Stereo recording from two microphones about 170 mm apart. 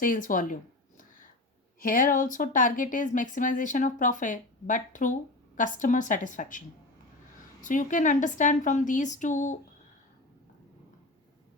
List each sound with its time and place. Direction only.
0.0 s speech: 50° left (ahead or behind)
1.8 s speech: 55° left (ahead or behind)
7.6 s speech: 50° left (ahead or behind)